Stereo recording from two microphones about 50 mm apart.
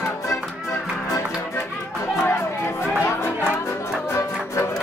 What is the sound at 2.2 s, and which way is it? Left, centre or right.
Chatter, left.